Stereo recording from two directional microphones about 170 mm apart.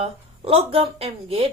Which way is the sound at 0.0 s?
35° right (ahead or behind).